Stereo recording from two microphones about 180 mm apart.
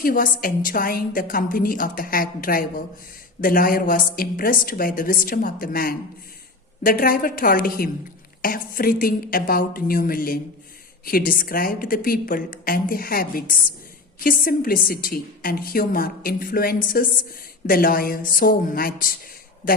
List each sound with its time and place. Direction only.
0.0 s a woman's voice: 50° left (ahead or behind)